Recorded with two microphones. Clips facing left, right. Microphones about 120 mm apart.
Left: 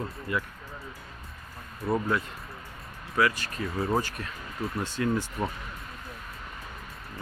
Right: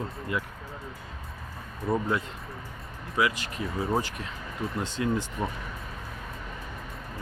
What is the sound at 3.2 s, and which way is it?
Speech, 15° right (ahead or behind).